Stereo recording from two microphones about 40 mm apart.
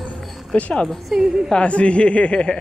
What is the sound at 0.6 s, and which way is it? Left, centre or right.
Speech, left.